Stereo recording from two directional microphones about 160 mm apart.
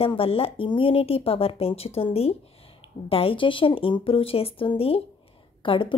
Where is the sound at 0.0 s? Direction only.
35° left (ahead or behind).